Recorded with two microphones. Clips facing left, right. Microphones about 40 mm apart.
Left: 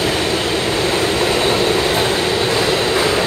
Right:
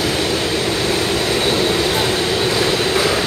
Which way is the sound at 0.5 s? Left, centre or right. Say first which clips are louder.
Left 1 dB; centre.